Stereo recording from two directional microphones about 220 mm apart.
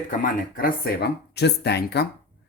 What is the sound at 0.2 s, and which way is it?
Speech, 40° left (ahead or behind).